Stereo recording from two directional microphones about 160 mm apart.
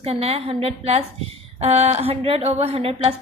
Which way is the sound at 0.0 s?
40° right (ahead or behind).